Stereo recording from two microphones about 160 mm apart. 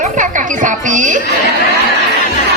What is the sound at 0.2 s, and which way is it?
Music, 55° right (ahead or behind).